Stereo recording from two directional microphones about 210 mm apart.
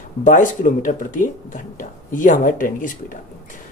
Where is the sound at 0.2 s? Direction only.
40° left (ahead or behind).